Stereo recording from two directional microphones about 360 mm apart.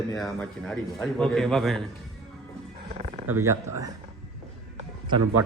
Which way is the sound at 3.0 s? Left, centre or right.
Centre.